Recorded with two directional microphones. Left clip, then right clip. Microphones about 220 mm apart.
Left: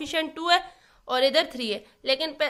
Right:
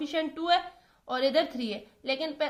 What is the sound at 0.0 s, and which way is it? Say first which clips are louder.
A woman's voice: left 3 dB; 35° left (ahead or behind).